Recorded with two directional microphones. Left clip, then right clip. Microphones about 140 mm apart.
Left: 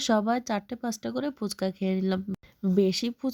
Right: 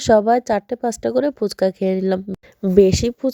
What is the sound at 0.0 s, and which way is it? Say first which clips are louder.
A woman's voice: right 12 dB; 35° right (ahead or behind).